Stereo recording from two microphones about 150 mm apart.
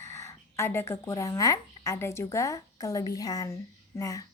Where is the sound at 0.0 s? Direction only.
20° left (ahead or behind).